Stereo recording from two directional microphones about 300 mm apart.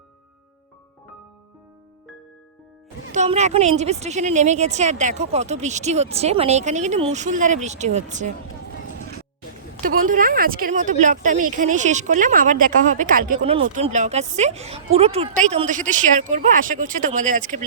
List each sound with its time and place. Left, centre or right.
3.1 s a woman's voice: right
9.8 s a woman's voice: right